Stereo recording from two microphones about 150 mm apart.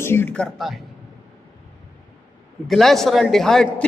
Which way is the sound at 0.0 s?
15° left (ahead or behind).